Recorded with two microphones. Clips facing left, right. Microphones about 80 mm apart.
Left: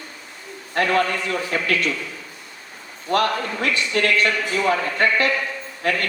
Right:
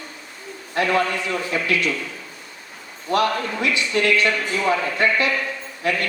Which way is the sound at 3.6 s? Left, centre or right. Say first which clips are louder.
Even; left.